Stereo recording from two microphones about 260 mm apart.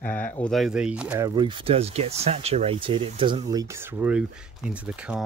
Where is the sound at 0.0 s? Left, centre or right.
Centre.